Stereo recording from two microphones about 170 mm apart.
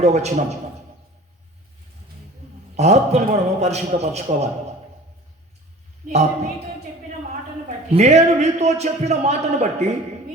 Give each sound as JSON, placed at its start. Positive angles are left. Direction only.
{"t": 0.0, "sound": "a man's voice", "side_deg": -40}
{"t": 2.7, "sound": "a man's voice", "side_deg": -40}
{"t": 6.1, "sound": "a man's voice", "side_deg": -40}
{"t": 7.9, "sound": "a man's voice", "side_deg": -40}